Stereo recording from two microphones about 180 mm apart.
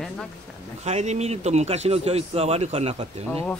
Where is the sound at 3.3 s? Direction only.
10° left (ahead or behind).